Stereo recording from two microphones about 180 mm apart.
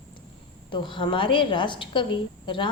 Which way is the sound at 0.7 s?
25° left (ahead or behind).